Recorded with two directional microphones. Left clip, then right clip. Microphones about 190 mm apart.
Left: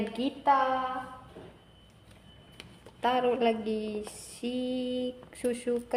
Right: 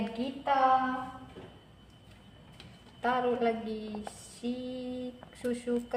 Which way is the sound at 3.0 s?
40° left (ahead or behind).